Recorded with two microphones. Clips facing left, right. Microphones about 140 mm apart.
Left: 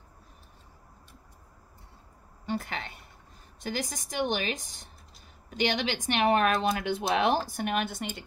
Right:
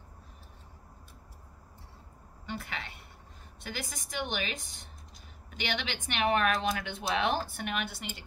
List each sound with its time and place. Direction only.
2.4 s a woman's voice: 40° left (ahead or behind)